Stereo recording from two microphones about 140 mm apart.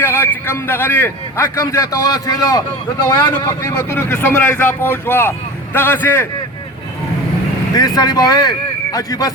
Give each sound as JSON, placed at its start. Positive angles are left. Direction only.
{"t": 0.0, "sound": "a man's voice", "side_deg": 15}
{"t": 7.7, "sound": "a man's voice", "side_deg": 25}